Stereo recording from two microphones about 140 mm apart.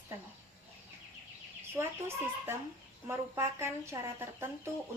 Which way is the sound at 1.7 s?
15° right (ahead or behind).